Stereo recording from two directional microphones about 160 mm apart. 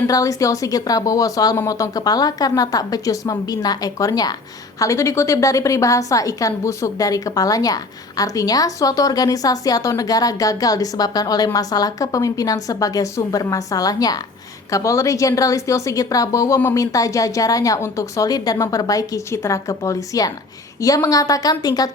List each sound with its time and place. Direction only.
0.1 s a woman's voice: 20° left (ahead or behind)